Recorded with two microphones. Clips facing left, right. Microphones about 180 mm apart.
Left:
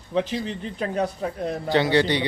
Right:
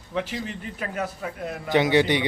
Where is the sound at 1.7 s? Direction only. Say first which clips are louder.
Right 1 dB; 15° right (ahead or behind).